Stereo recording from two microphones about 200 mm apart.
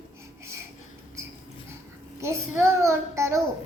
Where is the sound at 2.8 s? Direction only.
15° right (ahead or behind).